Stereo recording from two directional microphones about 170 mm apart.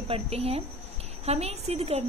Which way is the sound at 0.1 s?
35° right (ahead or behind).